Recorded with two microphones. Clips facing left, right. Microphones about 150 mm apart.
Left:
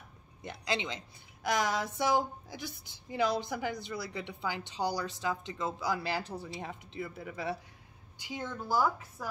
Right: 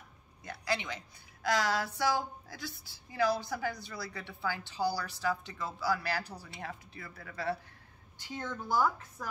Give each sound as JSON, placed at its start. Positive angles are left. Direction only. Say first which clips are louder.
{"t": 0.4, "sound": "a woman's voice", "louder": "left 1 dB", "side_deg": 20}